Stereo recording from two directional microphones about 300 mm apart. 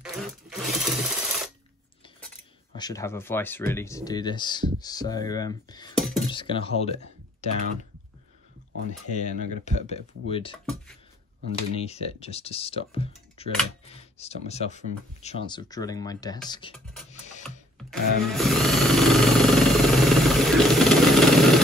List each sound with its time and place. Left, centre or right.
0.1 s sewing machine: centre
2.7 s speech: centre
5.9 s speech: centre
6.2 s speech: centre
9.1 s speech: left
11.7 s speech: left
17.7 s a sound: centre